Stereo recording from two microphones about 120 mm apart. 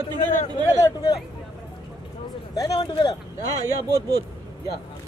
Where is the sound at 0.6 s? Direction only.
30° left (ahead or behind).